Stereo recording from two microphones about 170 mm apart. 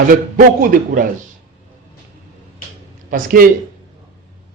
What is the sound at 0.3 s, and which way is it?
Speech, 55° right (ahead or behind).